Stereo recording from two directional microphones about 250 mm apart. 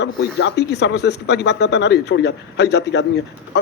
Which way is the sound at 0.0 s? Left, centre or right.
Left.